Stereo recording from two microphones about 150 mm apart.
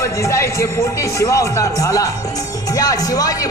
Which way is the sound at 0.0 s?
20° left (ahead or behind).